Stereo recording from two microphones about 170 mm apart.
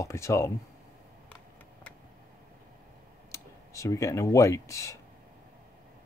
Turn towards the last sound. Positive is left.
turn(degrees=15)  # may be behind; listen again after turning